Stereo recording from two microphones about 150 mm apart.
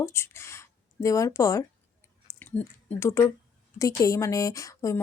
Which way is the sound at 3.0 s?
20° left (ahead or behind).